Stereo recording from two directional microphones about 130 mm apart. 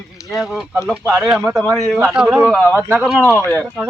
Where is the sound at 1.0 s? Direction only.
25° right (ahead or behind).